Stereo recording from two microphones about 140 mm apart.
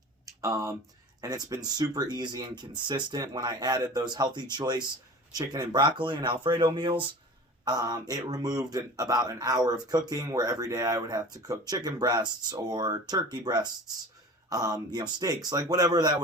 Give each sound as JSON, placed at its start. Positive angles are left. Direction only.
{"t": 0.4, "sound": "speech", "side_deg": -25}